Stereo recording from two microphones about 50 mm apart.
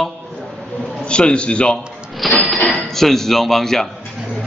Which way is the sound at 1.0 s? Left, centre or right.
Centre.